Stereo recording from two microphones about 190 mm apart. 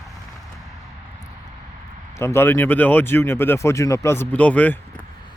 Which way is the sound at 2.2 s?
15° left (ahead or behind).